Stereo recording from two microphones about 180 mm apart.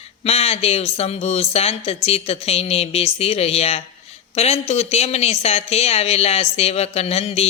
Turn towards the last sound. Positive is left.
turn(degrees=35)  # may be behind; listen again after turning